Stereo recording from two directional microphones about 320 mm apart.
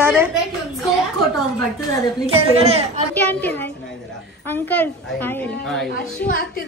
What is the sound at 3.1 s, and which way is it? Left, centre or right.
Speech, centre.